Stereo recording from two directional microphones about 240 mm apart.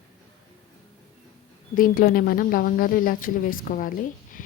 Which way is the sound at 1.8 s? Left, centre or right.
Left.